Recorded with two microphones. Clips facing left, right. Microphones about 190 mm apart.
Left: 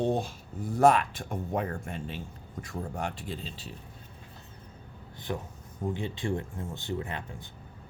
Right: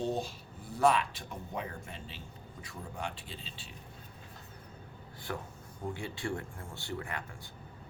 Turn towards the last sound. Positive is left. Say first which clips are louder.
# left 5 dB
turn(degrees=25)  # may be behind; listen again after turning